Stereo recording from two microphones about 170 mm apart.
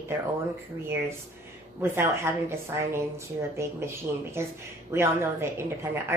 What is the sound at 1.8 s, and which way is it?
A woman's voice, 15° right (ahead or behind).